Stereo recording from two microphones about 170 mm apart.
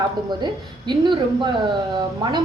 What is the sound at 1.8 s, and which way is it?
Speech, 20° right (ahead or behind).